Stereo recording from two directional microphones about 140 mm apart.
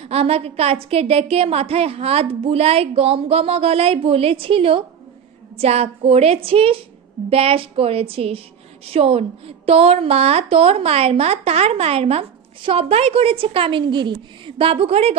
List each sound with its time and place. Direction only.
0.0 s a woman's voice: 45° right (ahead or behind)